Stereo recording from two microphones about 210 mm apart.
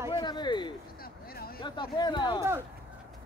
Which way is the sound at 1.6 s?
20° left (ahead or behind).